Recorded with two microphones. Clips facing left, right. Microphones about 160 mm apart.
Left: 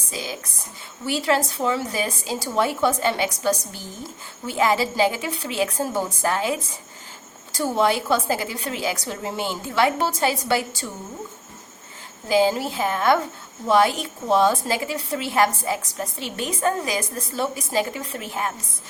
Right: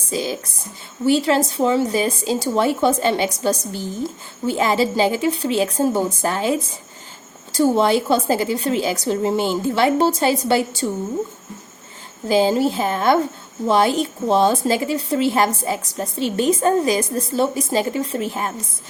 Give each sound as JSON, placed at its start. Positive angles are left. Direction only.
{"t": 0.1, "sound": "a woman's voice", "side_deg": -30}
{"t": 4.4, "sound": "a woman's voice", "side_deg": -30}
{"t": 12.3, "sound": "a woman's voice", "side_deg": -30}